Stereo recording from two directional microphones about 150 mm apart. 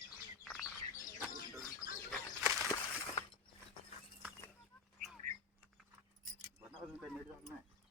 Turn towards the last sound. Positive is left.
turn(degrees=0)  # may be behind; listen again after turning